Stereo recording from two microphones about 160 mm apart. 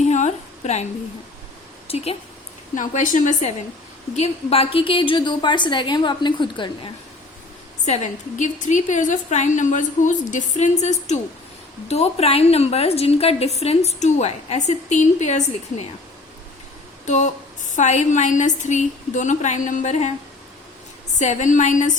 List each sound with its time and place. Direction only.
0.0 s a sound: 45° left (ahead or behind)
1.9 s speech: 40° left (ahead or behind)
2.7 s a woman's voice: 55° left (ahead or behind)
4.1 s a woman's voice: 40° left (ahead or behind)
7.9 s a woman's voice: 45° left (ahead or behind)
17.1 s a woman's voice: 50° left (ahead or behind)
21.2 s a woman's voice: 50° left (ahead or behind)